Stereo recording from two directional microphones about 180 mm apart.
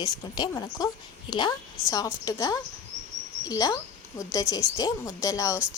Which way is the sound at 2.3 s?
20° left (ahead or behind).